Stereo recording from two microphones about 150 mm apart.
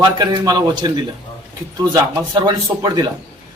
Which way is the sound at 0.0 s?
25° right (ahead or behind).